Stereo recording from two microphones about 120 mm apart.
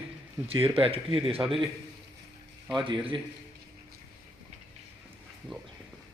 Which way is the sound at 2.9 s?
45° right (ahead or behind).